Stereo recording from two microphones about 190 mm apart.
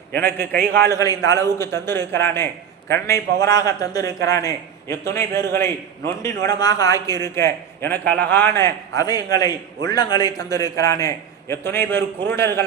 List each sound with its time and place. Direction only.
0.2 s a man's voice: 10° left (ahead or behind)
8.0 s a man's voice: 60° right (ahead or behind)
8.3 s a man's voice: 10° left (ahead or behind)